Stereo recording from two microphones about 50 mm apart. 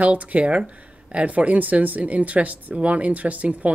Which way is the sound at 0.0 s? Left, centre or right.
Right.